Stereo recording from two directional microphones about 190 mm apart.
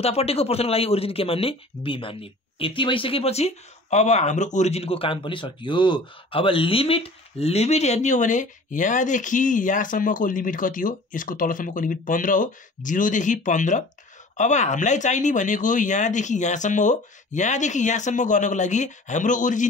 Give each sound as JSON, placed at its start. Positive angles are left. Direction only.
{"t": 0.0, "sound": "speech", "side_deg": 30}